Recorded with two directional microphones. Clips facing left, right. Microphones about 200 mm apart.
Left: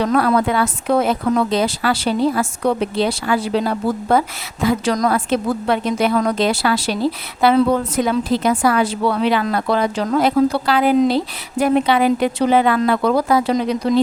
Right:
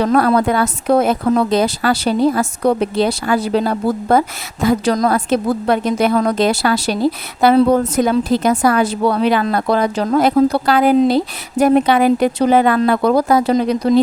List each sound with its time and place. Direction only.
0.0 s a woman's voice: 40° right (ahead or behind)